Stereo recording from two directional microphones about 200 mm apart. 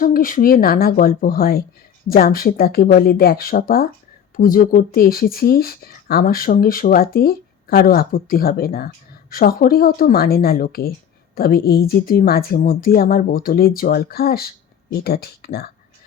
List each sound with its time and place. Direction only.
0.0 s speech: 45° left (ahead or behind)